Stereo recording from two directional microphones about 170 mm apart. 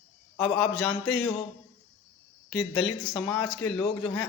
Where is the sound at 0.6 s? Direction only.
5° left (ahead or behind).